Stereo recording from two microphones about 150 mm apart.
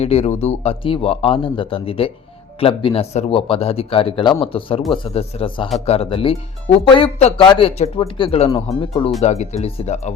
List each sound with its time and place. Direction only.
0.0 s speech: 45° left (ahead or behind)
9.2 s speech: 45° left (ahead or behind)